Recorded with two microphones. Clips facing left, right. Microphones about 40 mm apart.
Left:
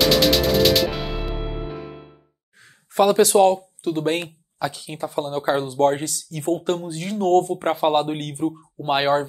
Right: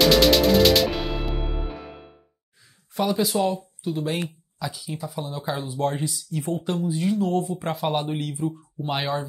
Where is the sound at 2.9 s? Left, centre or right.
Left.